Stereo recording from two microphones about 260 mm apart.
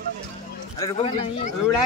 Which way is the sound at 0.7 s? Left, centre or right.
Centre.